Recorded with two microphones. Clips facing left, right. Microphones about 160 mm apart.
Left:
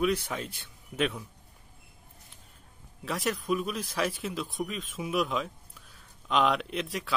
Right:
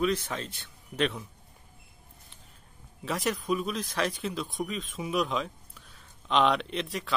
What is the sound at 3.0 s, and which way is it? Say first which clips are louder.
Speech: right 1 dB; centre (ahead or behind).